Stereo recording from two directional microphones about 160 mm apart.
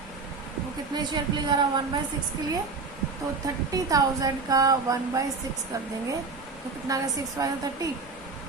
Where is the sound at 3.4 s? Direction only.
20° right (ahead or behind).